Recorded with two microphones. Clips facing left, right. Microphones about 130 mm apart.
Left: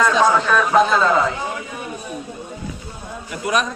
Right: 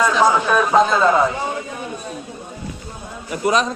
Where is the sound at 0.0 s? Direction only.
15° right (ahead or behind).